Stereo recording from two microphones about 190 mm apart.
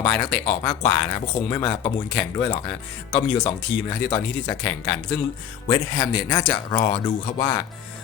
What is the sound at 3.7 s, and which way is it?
Speech, 5° left (ahead or behind).